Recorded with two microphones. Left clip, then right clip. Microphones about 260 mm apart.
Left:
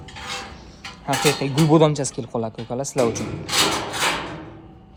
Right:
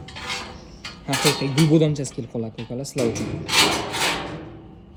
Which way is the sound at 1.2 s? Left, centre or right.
Centre.